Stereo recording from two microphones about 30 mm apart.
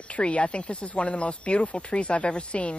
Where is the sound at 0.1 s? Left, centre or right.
Left.